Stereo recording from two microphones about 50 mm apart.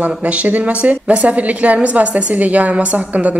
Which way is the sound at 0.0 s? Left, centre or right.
Right.